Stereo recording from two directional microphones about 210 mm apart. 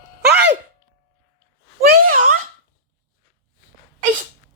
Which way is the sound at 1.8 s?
40° right (ahead or behind).